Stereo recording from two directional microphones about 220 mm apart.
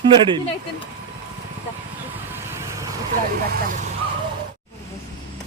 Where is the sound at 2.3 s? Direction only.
15° right (ahead or behind).